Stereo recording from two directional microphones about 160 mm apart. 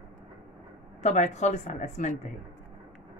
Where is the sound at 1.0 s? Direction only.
45° left (ahead or behind).